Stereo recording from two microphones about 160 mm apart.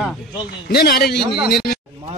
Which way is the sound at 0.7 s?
80° left.